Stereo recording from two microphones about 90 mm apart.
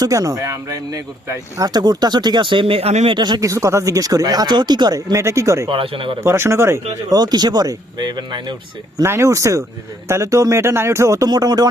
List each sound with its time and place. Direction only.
0.0 s speech: 40° right (ahead or behind); by 3.2 s 80° right
3.2 s speech: 55° right (ahead or behind)
3.4 s speech: 35° right (ahead or behind)
5.1 s speech: 35° right (ahead or behind)
5.6 s speech: 90° right
6.1 s speech: 30° right (ahead or behind)
7.1 s speech: 50° right (ahead or behind)
9.0 s speech: 30° right (ahead or behind)
11.3 s speech: 45° right (ahead or behind)